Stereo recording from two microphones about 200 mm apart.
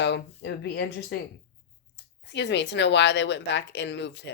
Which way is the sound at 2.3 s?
60° left (ahead or behind).